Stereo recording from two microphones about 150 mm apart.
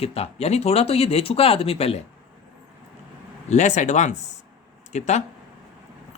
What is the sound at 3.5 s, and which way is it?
Speech, 50° left (ahead or behind).